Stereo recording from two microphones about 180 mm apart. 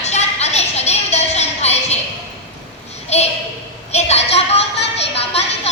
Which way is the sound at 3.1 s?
35° left (ahead or behind).